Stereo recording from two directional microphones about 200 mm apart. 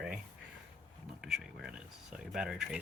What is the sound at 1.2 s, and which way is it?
Speech, centre (ahead or behind).